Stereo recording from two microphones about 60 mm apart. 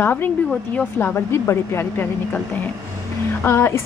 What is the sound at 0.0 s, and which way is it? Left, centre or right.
A woman's voice, left.